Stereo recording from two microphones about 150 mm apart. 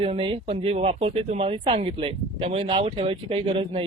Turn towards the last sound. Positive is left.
turn(degrees=-40)  # may be behind; listen again after turning